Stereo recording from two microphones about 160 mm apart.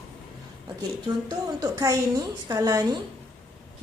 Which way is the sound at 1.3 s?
20° right (ahead or behind).